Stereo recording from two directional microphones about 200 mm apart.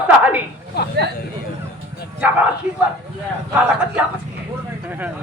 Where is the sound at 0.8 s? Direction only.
55° left (ahead or behind).